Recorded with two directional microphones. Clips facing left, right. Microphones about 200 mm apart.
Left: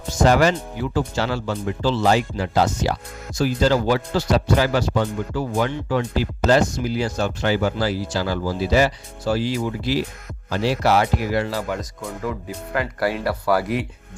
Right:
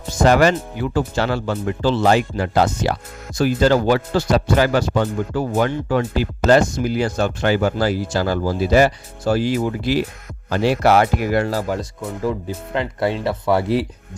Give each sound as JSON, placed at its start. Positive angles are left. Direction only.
{"t": 0.2, "sound": "speech", "side_deg": -60}
{"t": 12.2, "sound": "speech", "side_deg": -25}